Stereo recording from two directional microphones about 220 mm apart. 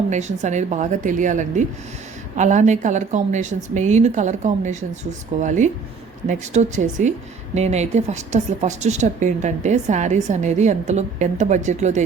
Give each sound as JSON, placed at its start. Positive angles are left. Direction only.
{"t": 0.1, "sound": "speech", "side_deg": -30}